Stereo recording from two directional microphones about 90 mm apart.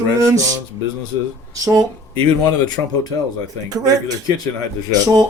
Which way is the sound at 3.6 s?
45° right (ahead or behind).